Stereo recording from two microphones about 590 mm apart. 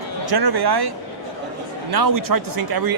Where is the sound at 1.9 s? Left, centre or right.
Right.